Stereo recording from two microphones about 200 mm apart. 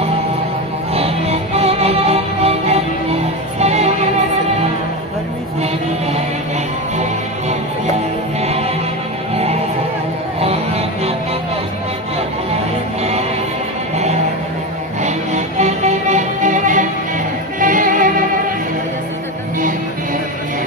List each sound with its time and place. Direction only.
0.9 s music: 30° right (ahead or behind)
8.4 s music: 30° right (ahead or behind)
15.0 s music: 35° right (ahead or behind)